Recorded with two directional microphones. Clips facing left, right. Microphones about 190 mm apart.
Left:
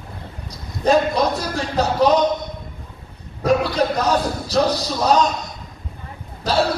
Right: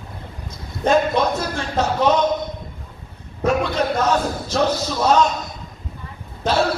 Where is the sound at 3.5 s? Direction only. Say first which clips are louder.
Left 2 dB; 35° left (ahead or behind).